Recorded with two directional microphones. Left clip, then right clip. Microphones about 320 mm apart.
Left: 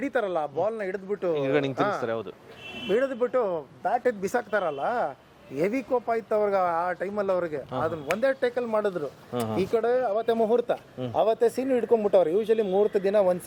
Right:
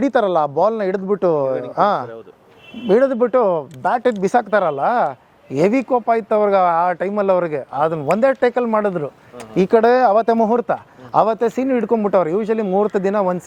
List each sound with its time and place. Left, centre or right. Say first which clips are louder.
0.0 s a man's voice: right 11 dB; right
8.1 s speech: right 9 dB; right
10.3 s speech: right 7 dB; right; by 13.3 s centre